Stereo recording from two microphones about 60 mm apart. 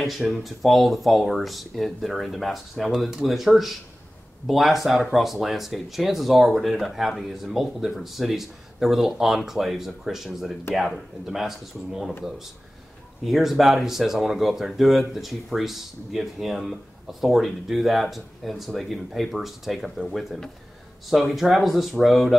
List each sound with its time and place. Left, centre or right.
0.0 s speech: centre
13.2 s speech: centre